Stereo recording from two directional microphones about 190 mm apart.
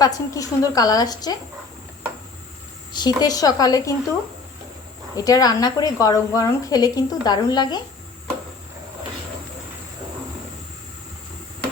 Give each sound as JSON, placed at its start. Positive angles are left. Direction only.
{"t": 0.0, "sound": "speech", "side_deg": 15}
{"t": 2.9, "sound": "speech", "side_deg": 20}
{"t": 5.1, "sound": "speech", "side_deg": 20}